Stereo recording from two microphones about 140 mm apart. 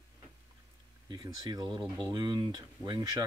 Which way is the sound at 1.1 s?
30° right (ahead or behind).